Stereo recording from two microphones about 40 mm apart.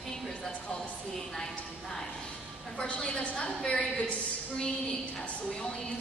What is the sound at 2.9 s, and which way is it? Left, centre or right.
Speech, left.